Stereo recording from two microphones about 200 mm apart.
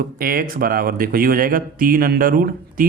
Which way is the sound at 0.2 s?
45° right (ahead or behind).